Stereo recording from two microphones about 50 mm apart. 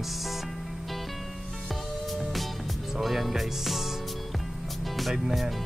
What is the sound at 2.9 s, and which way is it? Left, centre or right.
Speech, centre.